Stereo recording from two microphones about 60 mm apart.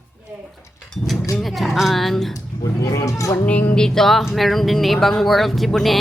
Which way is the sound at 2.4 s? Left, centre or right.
Left.